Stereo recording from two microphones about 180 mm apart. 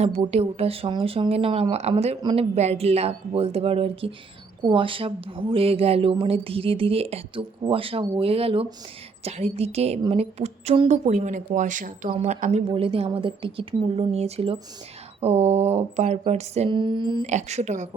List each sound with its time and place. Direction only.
0.3 s speech: 35° right (ahead or behind)
12.0 s speech: 35° right (ahead or behind)
17.2 s speech: 40° right (ahead or behind)